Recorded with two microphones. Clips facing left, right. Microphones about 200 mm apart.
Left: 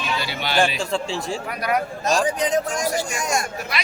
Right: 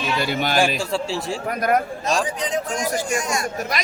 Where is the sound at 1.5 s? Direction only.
45° right (ahead or behind).